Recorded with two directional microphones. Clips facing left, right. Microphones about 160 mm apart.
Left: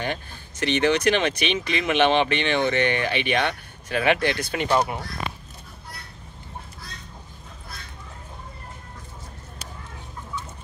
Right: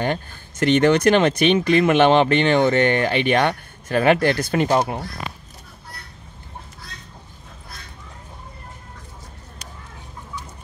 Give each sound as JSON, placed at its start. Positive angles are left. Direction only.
{"t": 0.0, "sound": "speech", "side_deg": -50}